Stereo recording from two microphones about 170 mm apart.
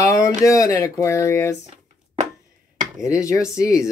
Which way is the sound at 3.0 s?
20° left (ahead or behind).